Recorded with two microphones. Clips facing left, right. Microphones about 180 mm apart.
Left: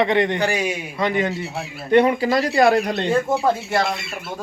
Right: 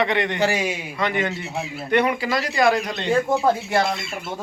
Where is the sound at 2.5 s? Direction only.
50° left (ahead or behind).